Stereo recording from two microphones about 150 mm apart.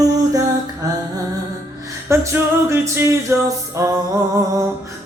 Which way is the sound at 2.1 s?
20° right (ahead or behind).